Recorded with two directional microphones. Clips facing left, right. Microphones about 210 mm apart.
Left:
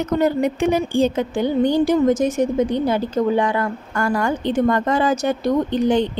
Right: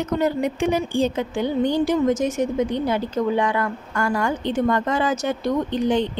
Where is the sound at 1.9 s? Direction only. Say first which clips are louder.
Left 3 dB; 35° left (ahead or behind).